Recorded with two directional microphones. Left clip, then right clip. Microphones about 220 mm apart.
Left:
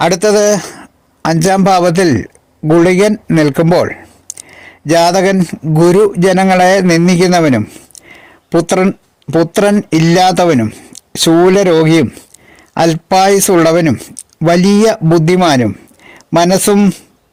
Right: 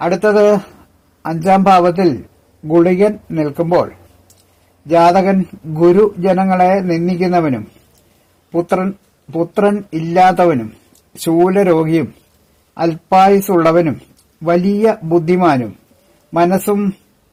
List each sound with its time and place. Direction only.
0.0 s a man's voice: 40° left (ahead or behind)